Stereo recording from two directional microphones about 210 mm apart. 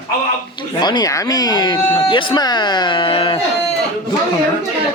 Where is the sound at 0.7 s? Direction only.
20° left (ahead or behind).